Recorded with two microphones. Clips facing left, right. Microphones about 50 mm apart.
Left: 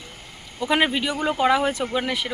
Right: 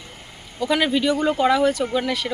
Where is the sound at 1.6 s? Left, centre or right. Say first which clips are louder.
Right 3 dB; left.